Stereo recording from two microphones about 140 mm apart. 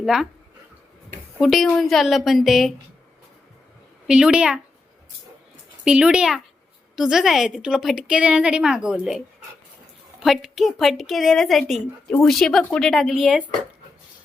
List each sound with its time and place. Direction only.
0.0 s speech: 5° right (ahead or behind)
1.4 s a woman's voice: centre (ahead or behind)
4.0 s a woman's voice: 5° right (ahead or behind)
5.8 s a woman's voice: 5° right (ahead or behind)
10.2 s a woman's voice: centre (ahead or behind)